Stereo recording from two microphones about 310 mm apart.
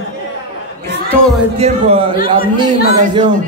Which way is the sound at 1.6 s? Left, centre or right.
Centre.